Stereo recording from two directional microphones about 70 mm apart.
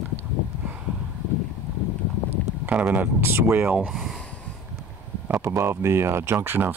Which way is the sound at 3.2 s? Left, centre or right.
Right.